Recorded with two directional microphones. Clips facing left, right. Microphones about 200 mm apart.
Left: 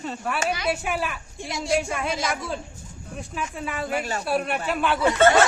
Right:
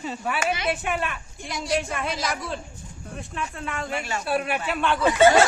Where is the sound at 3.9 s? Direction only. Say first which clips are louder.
Left 3 dB; 40° left (ahead or behind).